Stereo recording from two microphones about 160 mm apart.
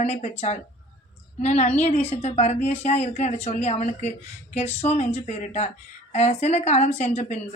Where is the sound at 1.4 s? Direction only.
45° left (ahead or behind).